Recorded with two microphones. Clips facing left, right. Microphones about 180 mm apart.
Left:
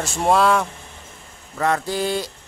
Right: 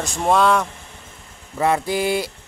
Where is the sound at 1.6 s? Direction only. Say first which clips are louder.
Right 2 dB; 10° right (ahead or behind).